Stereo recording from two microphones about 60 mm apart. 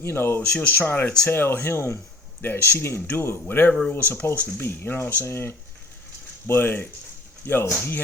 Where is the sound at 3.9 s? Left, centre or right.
Left.